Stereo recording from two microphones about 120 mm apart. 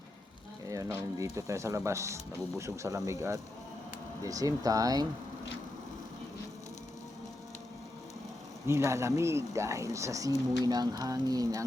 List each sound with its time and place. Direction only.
0.7 s speech: 25° right (ahead or behind)
8.6 s speech: 20° right (ahead or behind)